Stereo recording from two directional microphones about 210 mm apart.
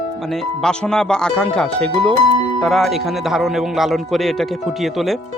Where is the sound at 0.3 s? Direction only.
5° left (ahead or behind).